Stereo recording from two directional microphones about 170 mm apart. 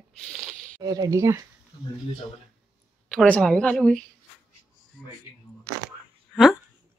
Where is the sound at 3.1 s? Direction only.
5° left (ahead or behind).